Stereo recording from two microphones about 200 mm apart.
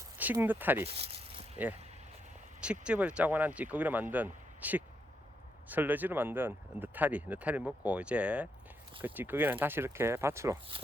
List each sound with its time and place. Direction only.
0.2 s speech: 10° right (ahead or behind)
0.9 s a sound: 30° right (ahead or behind)
2.8 s speech: 5° right (ahead or behind)